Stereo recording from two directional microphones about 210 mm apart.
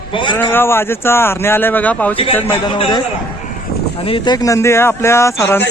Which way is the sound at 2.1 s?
25° left (ahead or behind).